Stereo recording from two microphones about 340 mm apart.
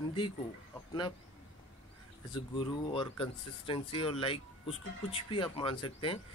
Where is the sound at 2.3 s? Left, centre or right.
Centre.